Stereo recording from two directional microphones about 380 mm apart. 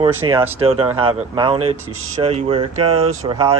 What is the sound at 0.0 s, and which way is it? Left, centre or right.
Speech, centre.